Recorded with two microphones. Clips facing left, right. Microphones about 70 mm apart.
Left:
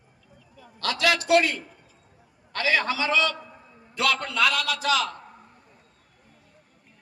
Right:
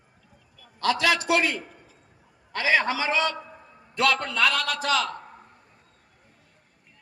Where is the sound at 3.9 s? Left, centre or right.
Right.